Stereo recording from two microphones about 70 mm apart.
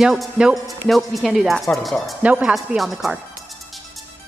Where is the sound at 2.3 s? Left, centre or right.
Centre.